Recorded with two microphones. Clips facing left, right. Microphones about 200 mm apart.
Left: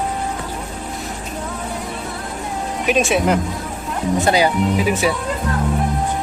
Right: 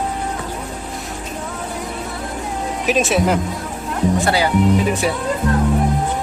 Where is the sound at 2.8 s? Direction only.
Centre (ahead or behind).